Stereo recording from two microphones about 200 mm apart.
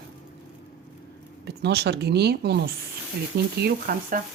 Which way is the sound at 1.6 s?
55° right (ahead or behind).